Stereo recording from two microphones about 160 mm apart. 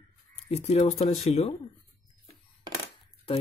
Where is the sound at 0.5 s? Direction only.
40° left (ahead or behind).